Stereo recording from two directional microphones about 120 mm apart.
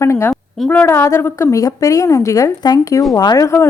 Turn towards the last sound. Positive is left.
turn(degrees=25)  # may be behind; listen again after turning